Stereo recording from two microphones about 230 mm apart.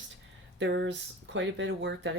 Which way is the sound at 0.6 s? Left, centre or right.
Right.